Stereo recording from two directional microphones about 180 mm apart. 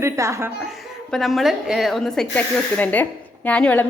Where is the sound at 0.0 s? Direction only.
15° right (ahead or behind).